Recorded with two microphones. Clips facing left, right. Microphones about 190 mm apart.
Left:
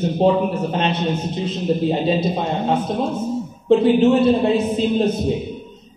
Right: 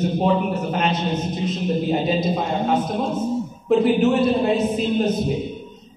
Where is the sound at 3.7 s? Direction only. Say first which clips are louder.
Left 3 dB; 30° left (ahead or behind).